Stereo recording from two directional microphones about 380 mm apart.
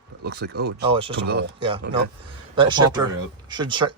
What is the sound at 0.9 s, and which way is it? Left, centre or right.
Speech, centre.